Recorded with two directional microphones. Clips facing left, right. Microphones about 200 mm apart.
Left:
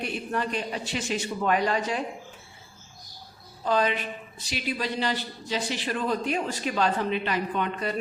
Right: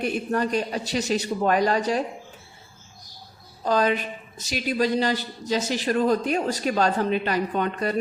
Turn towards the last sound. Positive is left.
turn(degrees=-40)  # may be behind; listen again after turning